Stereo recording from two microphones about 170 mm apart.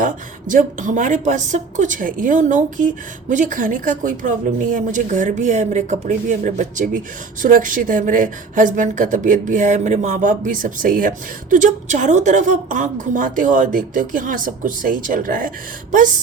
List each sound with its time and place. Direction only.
0.0 s a woman's voice: 50° right (ahead or behind)